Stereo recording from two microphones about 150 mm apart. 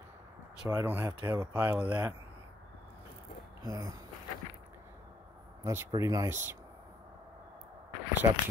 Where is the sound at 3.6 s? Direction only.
20° right (ahead or behind).